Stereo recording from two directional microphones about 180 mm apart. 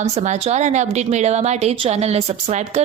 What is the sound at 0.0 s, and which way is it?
A woman's voice, 40° right (ahead or behind).